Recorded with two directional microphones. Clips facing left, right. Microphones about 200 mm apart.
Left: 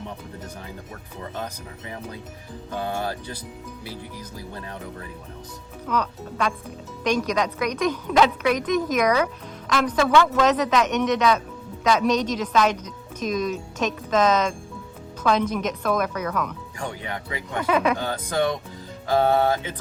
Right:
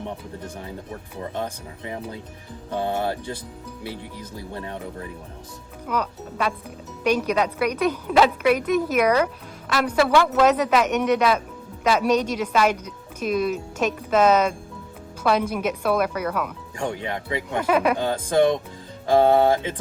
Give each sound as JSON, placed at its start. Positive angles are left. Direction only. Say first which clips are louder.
{"t": 1.4, "sound": "speech", "louder": "right 3 dB", "side_deg": -25}
{"t": 4.4, "sound": "speech", "louder": "right 4 dB", "side_deg": -25}
{"t": 5.9, "sound": "a woman's voice", "louder": "even", "side_deg": -5}
{"t": 16.7, "sound": "speech", "louder": "right 6 dB", "side_deg": -25}
{"t": 17.7, "sound": "speech", "louder": "right 1 dB", "side_deg": -5}
{"t": 18.0, "sound": "speech", "louder": "right 5 dB", "side_deg": -25}